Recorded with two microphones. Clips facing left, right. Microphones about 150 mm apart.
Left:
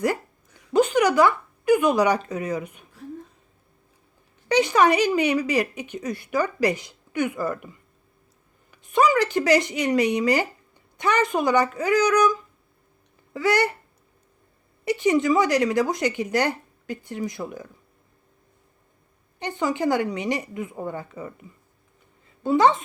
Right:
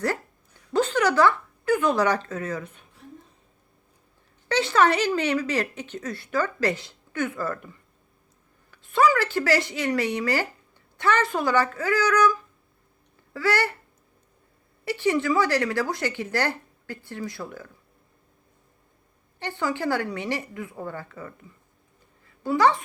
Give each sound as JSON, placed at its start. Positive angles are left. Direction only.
{"t": 0.7, "sound": "speech", "side_deg": 15}
{"t": 4.4, "sound": "speech", "side_deg": 15}
{"t": 14.8, "sound": "speech", "side_deg": 15}
{"t": 19.4, "sound": "speech", "side_deg": 20}
{"t": 22.4, "sound": "speech", "side_deg": 20}